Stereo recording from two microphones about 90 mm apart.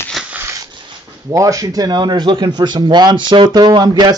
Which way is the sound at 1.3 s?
40° right (ahead or behind).